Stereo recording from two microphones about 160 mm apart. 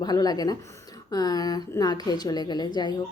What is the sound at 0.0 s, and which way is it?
Speech, 25° left (ahead or behind).